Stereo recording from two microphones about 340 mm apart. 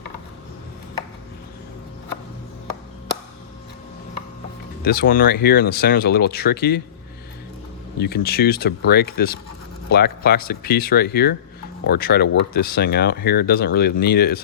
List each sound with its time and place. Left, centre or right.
4.8 s speech: left
7.9 s speech: left